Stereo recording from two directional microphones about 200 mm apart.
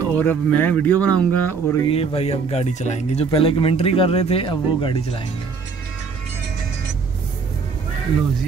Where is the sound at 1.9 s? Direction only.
30° left (ahead or behind).